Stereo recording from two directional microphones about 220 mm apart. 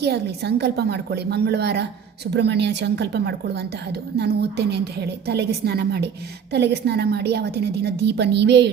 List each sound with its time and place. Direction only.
0.0 s a woman's voice: 50° right (ahead or behind)